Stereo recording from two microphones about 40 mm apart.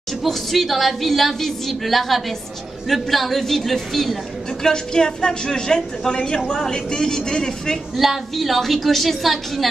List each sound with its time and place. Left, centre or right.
0.2 s a woman's voice: centre
4.6 s a woman's voice: centre
7.9 s a woman's voice: centre